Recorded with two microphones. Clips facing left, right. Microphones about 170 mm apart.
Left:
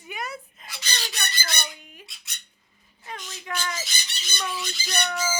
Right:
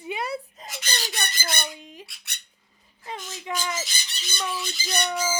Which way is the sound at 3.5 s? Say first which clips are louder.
Right 2 dB; 20° right (ahead or behind).